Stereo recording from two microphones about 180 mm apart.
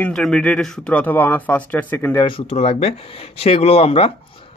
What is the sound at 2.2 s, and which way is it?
Speech, 35° left (ahead or behind).